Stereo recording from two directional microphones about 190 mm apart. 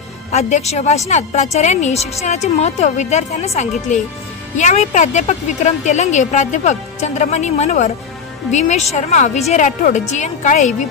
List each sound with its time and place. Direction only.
0.3 s a woman's voice: 35° left (ahead or behind)